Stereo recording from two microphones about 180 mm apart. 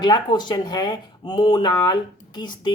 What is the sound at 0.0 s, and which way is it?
Speech, 25° left (ahead or behind).